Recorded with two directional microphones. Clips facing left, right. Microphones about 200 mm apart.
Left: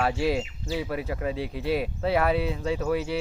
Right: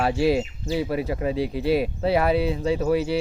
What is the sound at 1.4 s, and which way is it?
Speech, 35° right (ahead or behind).